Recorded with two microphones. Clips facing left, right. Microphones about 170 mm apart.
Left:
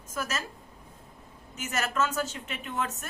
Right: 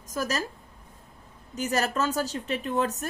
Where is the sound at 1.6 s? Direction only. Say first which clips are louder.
Right 3 dB; 35° right (ahead or behind).